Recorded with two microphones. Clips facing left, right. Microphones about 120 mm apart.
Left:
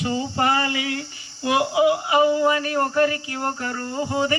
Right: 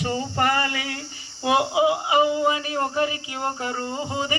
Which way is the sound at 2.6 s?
20° right (ahead or behind).